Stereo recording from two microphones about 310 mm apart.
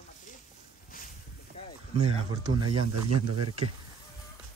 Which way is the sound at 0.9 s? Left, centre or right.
Left.